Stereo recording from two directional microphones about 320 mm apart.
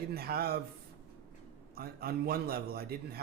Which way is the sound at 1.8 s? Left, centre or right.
Right.